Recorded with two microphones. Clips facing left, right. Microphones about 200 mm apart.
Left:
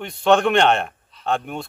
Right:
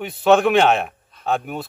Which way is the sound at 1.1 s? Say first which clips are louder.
Right 1 dB; 50° right (ahead or behind).